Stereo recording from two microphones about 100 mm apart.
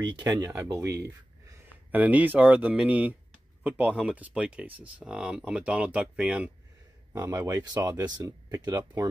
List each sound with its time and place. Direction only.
0.4 s speech: 25° right (ahead or behind)
1.9 s speech: 15° right (ahead or behind)
7.1 s speech: 30° right (ahead or behind)